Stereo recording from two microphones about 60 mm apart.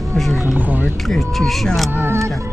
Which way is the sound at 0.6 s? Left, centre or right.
Right.